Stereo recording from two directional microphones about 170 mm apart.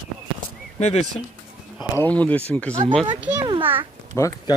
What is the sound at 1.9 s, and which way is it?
Speech, 10° left (ahead or behind).